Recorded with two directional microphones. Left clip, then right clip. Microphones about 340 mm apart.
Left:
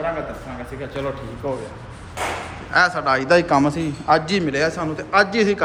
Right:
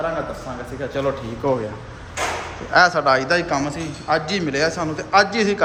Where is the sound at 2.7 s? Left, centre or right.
Centre.